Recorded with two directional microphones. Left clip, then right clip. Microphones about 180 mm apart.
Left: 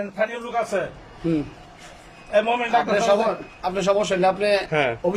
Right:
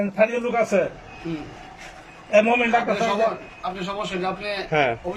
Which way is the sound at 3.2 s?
55° left (ahead or behind).